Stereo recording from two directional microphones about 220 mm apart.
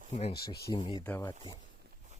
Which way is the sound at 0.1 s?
30° left (ahead or behind).